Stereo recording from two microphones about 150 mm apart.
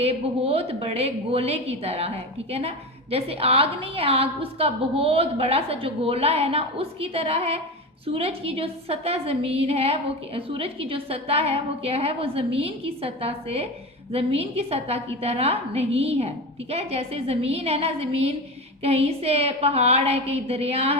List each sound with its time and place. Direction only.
0.0 s a woman's voice: 40° right (ahead or behind)